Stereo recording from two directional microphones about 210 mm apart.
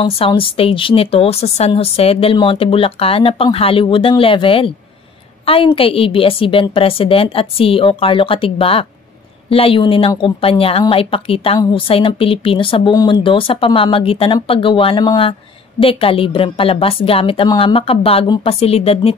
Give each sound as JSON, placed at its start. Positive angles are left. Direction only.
{"t": 0.0, "sound": "a woman's voice", "side_deg": 25}